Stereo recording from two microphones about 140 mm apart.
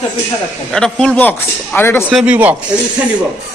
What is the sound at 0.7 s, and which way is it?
Speech, 5° left (ahead or behind).